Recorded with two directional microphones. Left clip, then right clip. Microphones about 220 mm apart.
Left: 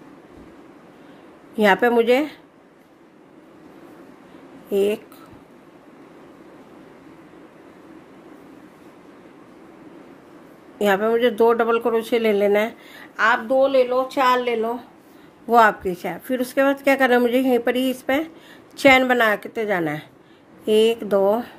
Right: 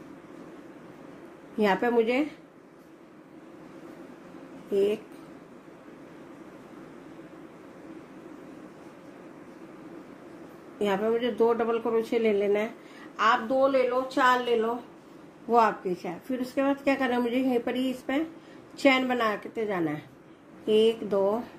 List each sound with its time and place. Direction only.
1.6 s speech: 30° left (ahead or behind)
4.6 s speech: 30° left (ahead or behind)
10.8 s speech: 30° left (ahead or behind)
15.5 s speech: 35° left (ahead or behind)